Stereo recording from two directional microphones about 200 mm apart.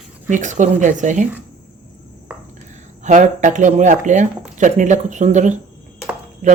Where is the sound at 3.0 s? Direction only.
40° right (ahead or behind).